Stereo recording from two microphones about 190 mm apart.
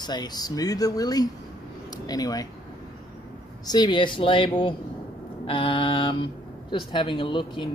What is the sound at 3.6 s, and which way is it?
Speech, 20° left (ahead or behind).